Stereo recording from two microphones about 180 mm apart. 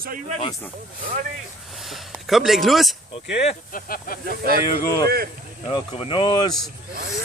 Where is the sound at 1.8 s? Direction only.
Centre (ahead or behind).